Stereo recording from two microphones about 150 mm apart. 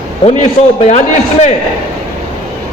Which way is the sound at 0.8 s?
50° left (ahead or behind).